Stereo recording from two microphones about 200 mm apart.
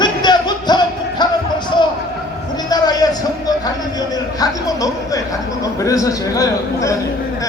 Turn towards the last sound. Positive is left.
turn(degrees=15)  # may be behind; listen again after turning